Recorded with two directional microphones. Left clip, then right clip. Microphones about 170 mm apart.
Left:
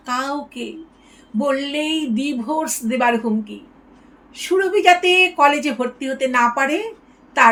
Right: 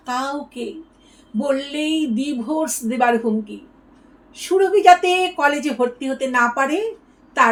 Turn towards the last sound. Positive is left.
turn(degrees=25)  # may be behind; listen again after turning